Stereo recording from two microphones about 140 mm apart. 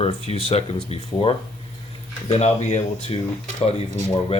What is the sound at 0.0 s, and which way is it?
Speech, 45° left (ahead or behind).